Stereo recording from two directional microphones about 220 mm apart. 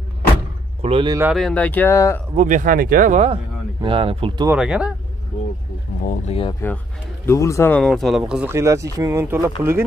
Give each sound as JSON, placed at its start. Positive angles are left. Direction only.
{"t": 0.8, "sound": "speech", "side_deg": -25}
{"t": 1.3, "sound": "speech", "side_deg": 5}
{"t": 2.3, "sound": "speech", "side_deg": -35}
{"t": 4.5, "sound": "speech", "side_deg": -5}
{"t": 6.0, "sound": "speech", "side_deg": 30}
{"t": 7.2, "sound": "speech", "side_deg": 15}